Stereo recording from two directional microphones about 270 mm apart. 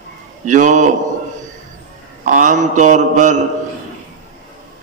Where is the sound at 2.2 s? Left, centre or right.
Right.